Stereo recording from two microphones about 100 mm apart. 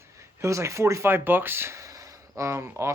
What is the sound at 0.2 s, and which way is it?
Speech, 30° right (ahead or behind).